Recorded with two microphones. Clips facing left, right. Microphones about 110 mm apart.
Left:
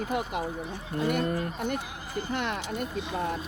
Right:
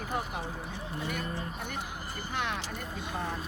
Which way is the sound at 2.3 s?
60° left (ahead or behind).